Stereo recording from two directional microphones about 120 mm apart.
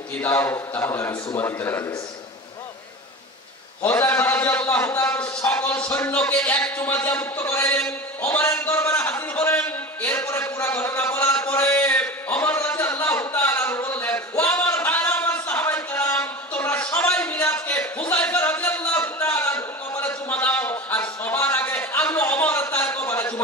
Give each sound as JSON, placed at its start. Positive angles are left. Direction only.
{"t": 0.2, "sound": "a man's voice", "side_deg": 20}
{"t": 4.0, "sound": "a man's voice", "side_deg": 20}
{"t": 5.5, "sound": "a sound", "side_deg": 15}